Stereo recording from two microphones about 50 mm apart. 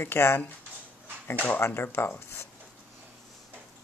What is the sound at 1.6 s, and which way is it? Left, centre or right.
Speech, left.